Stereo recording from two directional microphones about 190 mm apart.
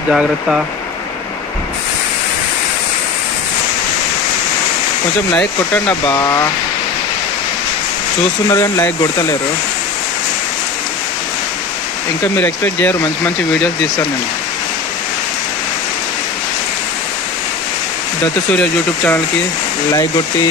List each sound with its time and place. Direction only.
5.9 s speech: 20° left (ahead or behind)
8.5 s speech: 15° left (ahead or behind)
12.4 s speech: 10° left (ahead or behind)
18.2 s speech: 10° left (ahead or behind)